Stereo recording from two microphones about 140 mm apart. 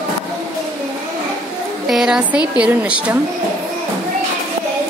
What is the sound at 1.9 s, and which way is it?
A woman's voice, centre (ahead or behind).